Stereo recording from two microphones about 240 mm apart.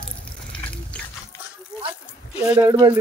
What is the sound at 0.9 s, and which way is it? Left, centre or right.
Music, centre.